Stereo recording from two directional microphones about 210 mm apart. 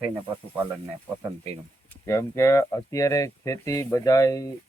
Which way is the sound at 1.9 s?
15° left (ahead or behind).